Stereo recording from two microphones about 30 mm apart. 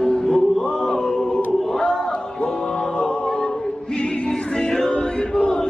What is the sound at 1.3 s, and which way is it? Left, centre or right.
Choir, left.